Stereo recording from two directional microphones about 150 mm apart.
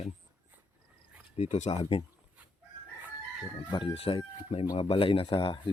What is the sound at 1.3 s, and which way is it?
Speech, 45° left (ahead or behind).